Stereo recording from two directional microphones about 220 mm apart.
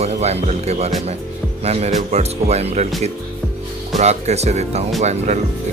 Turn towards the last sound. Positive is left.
turn(degrees=-30)  # may be behind; listen again after turning